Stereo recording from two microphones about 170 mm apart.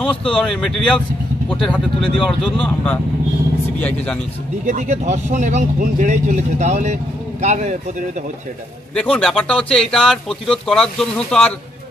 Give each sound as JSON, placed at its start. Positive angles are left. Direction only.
{"t": 0.0, "sound": "speech", "side_deg": 5}
{"t": 2.2, "sound": "speech", "side_deg": 5}
{"t": 4.6, "sound": "speech", "side_deg": -45}
{"t": 8.9, "sound": "speech", "side_deg": 5}